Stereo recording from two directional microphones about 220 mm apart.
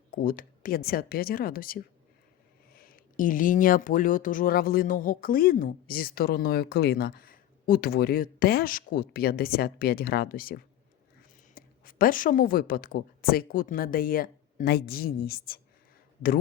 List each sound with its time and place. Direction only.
0.1 s a woman's voice: 40° left (ahead or behind)